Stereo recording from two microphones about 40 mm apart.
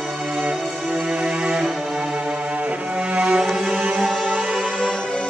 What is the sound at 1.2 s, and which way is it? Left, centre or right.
Music, right.